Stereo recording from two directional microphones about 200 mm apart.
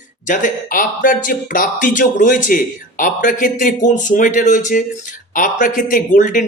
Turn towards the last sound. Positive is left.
turn(degrees=40)  # may be behind; listen again after turning